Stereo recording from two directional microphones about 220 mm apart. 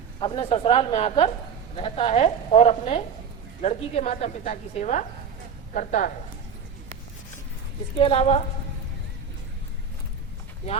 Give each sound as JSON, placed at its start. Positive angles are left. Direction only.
{"t": 0.2, "sound": "a woman's voice", "side_deg": 25}
{"t": 7.9, "sound": "a woman's voice", "side_deg": 25}